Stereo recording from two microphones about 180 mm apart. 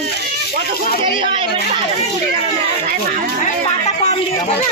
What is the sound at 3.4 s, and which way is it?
Music, 40° left (ahead or behind).